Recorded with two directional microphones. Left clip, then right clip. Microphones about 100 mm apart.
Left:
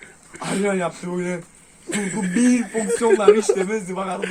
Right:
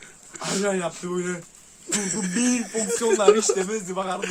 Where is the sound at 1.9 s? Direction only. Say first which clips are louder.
Left 3 dB; 35° right (ahead or behind).